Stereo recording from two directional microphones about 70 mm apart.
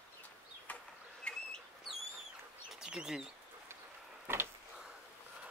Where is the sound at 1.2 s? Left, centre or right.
Centre.